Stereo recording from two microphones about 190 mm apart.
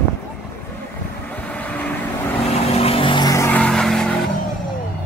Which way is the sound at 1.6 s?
5° left (ahead or behind).